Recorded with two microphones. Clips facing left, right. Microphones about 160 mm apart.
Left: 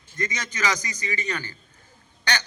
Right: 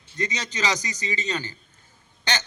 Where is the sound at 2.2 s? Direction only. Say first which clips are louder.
Even; 20° right (ahead or behind).